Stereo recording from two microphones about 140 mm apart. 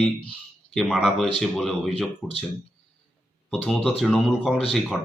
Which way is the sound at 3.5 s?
5° left (ahead or behind).